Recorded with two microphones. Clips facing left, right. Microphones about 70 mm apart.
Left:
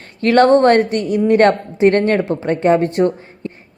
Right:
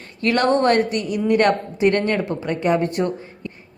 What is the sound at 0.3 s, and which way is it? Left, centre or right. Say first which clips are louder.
A woman's voice: left 7 dB; left.